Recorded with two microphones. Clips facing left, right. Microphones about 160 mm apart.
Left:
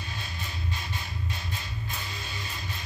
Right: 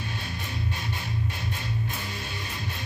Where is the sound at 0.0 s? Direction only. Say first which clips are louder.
Right 4 dB; 55° right (ahead or behind).